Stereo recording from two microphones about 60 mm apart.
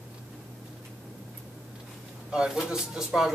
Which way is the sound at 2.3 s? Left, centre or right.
Centre.